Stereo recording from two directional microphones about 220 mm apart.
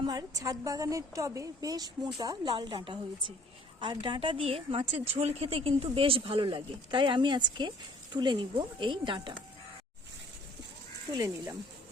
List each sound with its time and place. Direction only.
0.0 s a woman's voice: 15° right (ahead or behind)
11.1 s a woman's voice: 15° right (ahead or behind)